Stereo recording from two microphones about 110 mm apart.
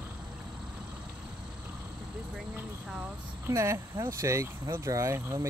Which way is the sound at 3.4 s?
25° right (ahead or behind).